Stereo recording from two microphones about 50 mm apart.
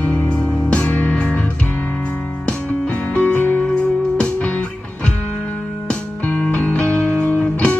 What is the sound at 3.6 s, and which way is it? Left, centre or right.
Music, centre.